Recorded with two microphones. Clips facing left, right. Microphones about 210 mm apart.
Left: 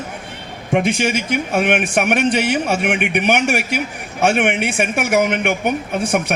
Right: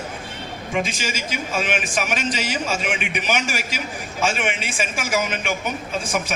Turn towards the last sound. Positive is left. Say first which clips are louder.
# left 6 dB
turn(degrees=60)  # may be behind; listen again after turning